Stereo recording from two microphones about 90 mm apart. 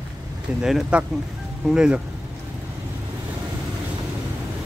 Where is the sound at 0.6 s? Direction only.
5° right (ahead or behind).